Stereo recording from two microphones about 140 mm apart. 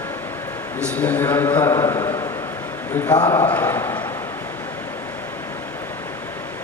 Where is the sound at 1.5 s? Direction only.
20° left (ahead or behind).